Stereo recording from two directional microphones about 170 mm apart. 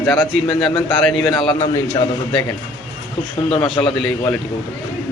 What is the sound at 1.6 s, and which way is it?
Speech, 20° left (ahead or behind).